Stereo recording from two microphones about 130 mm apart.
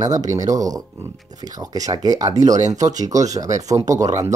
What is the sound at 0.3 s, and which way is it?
Speech, 25° right (ahead or behind).